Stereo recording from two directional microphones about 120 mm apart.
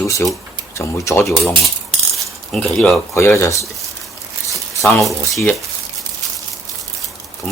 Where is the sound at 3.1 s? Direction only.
25° left (ahead or behind).